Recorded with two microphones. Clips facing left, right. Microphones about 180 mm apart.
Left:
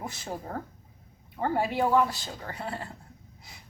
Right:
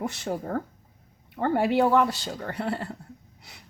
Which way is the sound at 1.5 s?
65° right (ahead or behind).